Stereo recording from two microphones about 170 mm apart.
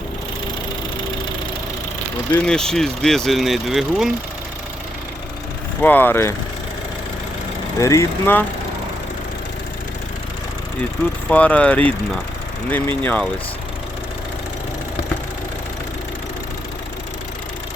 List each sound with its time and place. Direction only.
2.3 s speech: 5° left (ahead or behind)
5.8 s speech: 10° left (ahead or behind)
7.8 s speech: 20° left (ahead or behind)
11.3 s speech: 10° left (ahead or behind)
13.0 s speech: 10° left (ahead or behind)